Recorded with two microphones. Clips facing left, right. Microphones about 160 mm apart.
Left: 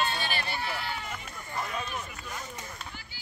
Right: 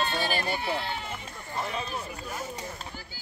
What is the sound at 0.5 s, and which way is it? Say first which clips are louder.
Speech: right 4 dB; 20° right (ahead or behind).